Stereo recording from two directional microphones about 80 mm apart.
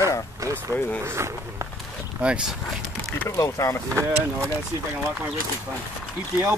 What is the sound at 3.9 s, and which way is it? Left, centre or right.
Speech, right.